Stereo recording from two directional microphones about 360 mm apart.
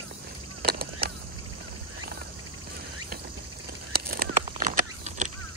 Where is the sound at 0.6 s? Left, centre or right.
Right.